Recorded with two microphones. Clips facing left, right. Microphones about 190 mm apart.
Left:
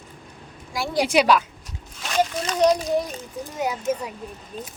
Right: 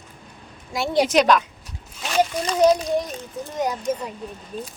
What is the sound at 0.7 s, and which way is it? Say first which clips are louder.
Speech: right 3 dB; 25° right (ahead or behind).